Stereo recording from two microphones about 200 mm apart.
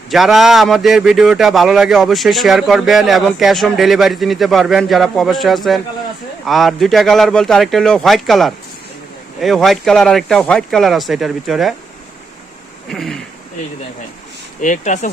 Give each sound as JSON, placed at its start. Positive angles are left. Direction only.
{"t": 0.1, "sound": "a man's voice", "side_deg": 0}
{"t": 12.9, "sound": "a man's voice", "side_deg": 0}
{"t": 14.6, "sound": "speech", "side_deg": 40}